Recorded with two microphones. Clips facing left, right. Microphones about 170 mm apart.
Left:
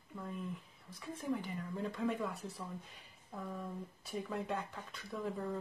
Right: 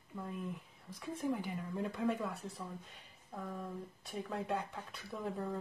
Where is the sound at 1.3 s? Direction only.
Centre (ahead or behind).